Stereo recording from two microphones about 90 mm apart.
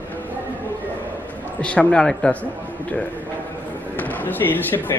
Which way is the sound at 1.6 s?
10° left (ahead or behind).